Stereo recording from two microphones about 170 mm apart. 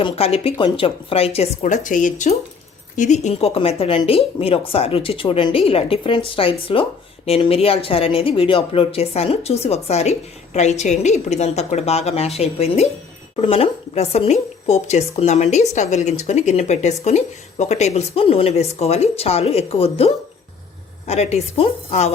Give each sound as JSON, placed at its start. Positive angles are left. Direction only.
{"t": 0.0, "sound": "a woman's voice", "side_deg": 35}